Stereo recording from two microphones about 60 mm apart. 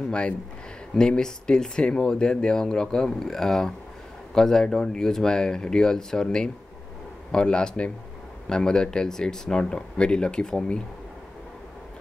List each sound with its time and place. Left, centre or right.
0.1 s speech: centre